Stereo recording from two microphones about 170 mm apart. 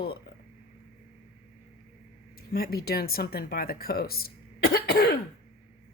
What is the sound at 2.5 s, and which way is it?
Speech, 65° left (ahead or behind).